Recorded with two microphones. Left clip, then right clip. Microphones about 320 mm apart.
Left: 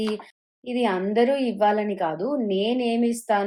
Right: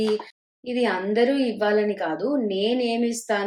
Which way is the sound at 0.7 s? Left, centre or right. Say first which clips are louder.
Right 1 dB; centre.